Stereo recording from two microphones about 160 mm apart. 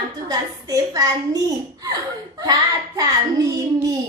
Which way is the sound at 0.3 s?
25° right (ahead or behind).